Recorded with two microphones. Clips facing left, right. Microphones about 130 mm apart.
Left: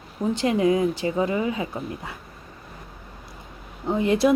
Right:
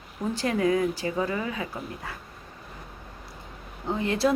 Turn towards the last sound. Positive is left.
turn(degrees=20)  # may be behind; listen again after turning